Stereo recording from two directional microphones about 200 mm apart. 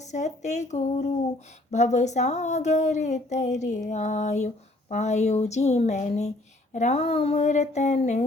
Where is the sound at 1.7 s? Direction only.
35° left (ahead or behind).